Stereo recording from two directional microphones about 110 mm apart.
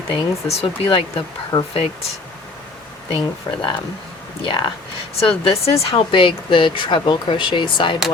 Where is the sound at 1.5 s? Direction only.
45° left (ahead or behind).